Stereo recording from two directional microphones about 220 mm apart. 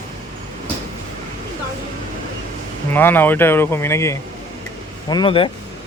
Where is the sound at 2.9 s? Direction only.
10° left (ahead or behind).